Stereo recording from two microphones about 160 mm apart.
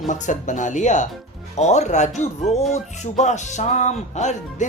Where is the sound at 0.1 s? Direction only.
50° left (ahead or behind).